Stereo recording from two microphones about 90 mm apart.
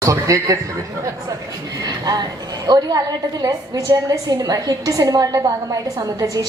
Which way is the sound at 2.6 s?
45° right (ahead or behind).